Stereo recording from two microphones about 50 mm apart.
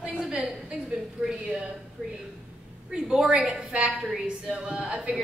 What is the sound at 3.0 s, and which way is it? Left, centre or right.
Speech, centre.